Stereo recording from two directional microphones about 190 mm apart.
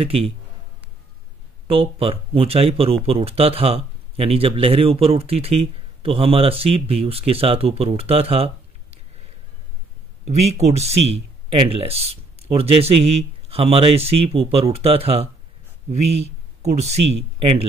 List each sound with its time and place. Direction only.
0.0 s speech: 30° right (ahead or behind)
1.7 s speech: 30° right (ahead or behind)
10.2 s speech: 35° right (ahead or behind)